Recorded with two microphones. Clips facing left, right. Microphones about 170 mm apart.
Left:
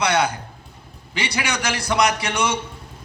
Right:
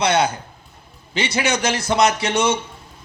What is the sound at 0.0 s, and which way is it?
A man's voice, 25° right (ahead or behind).